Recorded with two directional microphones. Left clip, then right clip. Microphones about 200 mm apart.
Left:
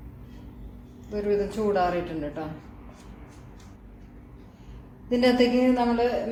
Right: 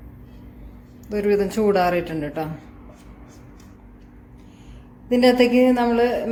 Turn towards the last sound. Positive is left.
turn(degrees=-45)  # may be behind; listen again after turning